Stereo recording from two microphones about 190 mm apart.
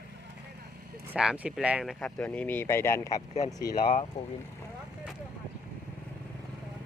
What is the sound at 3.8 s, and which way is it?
Speech, 35° left (ahead or behind).